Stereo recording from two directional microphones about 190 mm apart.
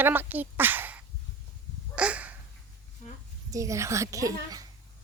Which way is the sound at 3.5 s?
15° right (ahead or behind).